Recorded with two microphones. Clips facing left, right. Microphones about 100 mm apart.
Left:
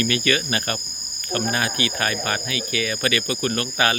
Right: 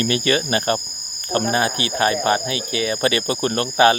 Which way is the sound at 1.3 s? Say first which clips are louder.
Right 4 dB; 30° right (ahead or behind).